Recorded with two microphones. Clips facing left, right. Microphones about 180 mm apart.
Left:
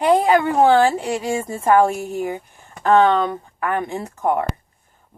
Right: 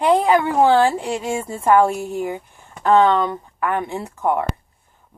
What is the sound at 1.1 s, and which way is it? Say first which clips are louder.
A woman's voice: left 1 dB; 35° left (ahead or behind).